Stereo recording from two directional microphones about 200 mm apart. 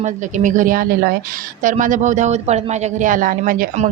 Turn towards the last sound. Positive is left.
turn(degrees=-45)  # may be behind; listen again after turning